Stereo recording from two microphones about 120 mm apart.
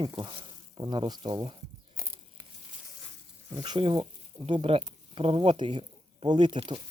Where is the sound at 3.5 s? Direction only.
35° right (ahead or behind).